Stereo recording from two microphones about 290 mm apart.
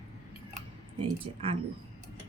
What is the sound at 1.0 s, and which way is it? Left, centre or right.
Speech, centre.